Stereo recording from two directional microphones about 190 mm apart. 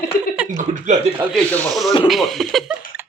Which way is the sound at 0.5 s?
40° right (ahead or behind).